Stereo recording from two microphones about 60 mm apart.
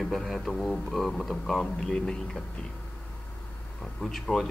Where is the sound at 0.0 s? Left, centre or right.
Centre.